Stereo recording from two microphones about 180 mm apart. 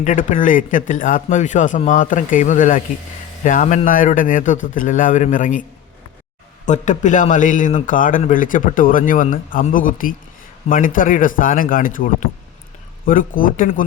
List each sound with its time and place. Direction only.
0.0 s a man's voice: 45° left (ahead or behind)
6.7 s a man's voice: 45° left (ahead or behind)